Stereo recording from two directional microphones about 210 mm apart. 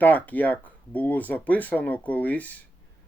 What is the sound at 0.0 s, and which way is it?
Speech, 10° left (ahead or behind).